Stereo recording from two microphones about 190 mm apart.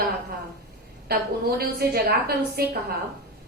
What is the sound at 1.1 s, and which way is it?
A woman's voice, 55° right (ahead or behind).